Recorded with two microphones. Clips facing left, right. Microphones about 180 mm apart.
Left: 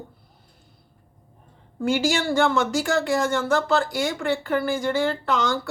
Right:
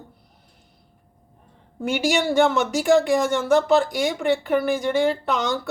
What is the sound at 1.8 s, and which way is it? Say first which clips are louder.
Speech: right 1 dB; 20° right (ahead or behind).